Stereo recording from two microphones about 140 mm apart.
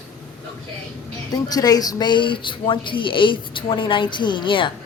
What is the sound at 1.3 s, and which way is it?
Speech, 30° left (ahead or behind).